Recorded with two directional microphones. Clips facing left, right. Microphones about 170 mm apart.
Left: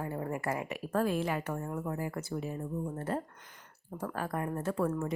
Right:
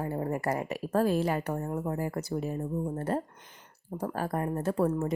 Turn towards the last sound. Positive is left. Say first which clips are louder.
# right 4 dB
turn(degrees=-35)  # may be behind; listen again after turning